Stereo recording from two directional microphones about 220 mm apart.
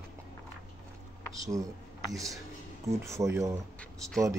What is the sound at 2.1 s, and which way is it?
Speech, 15° right (ahead or behind).